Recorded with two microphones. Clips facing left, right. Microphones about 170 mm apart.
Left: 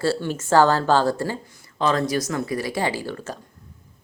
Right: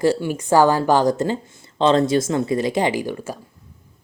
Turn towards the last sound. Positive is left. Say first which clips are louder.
# right 5 dB
turn(degrees=-10)  # may be behind; listen again after turning